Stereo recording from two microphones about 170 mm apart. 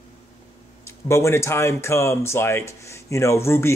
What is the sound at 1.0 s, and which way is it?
Speech, 15° left (ahead or behind).